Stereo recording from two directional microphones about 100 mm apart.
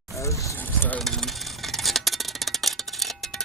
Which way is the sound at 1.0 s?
Centre (ahead or behind).